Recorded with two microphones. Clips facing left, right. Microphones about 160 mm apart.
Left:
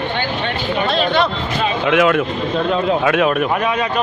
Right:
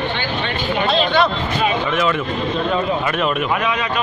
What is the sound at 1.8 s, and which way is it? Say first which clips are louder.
Speech: left 5 dB; 75° left (ahead or behind).